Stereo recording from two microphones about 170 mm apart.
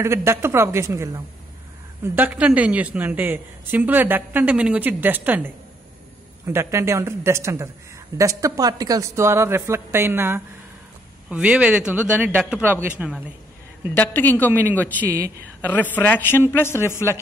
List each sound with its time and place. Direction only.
0.0 s speech: 15° right (ahead or behind)
13.9 s a man's voice: 10° left (ahead or behind)
14.5 s speech: 10° right (ahead or behind)
15.6 s a man's voice: 10° left (ahead or behind)